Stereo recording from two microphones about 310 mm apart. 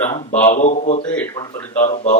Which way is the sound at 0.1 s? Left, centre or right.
Centre.